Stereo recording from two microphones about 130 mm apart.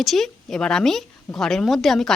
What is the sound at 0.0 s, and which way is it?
A woman's voice, centre (ahead or behind).